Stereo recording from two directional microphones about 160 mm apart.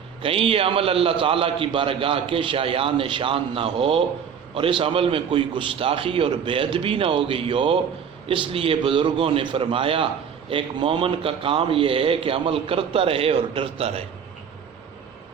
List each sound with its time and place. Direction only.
0.2 s a man's voice: 35° right (ahead or behind)